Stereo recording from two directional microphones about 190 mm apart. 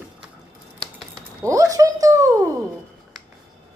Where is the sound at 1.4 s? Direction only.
20° right (ahead or behind).